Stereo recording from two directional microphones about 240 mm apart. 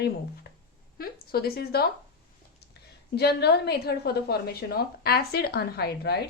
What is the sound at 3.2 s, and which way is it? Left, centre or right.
A woman's voice, left.